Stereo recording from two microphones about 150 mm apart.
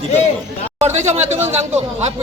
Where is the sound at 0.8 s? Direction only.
50° right (ahead or behind).